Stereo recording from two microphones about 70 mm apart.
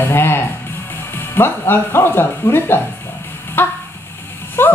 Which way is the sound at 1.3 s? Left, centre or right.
Left.